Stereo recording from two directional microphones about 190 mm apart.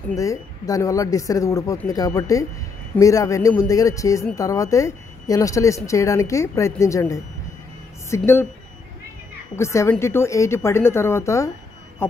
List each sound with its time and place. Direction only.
0.1 s speech: 15° left (ahead or behind)
9.6 s speech: 15° left (ahead or behind)